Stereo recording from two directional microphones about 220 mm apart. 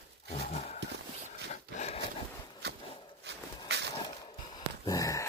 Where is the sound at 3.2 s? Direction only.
50° right (ahead or behind).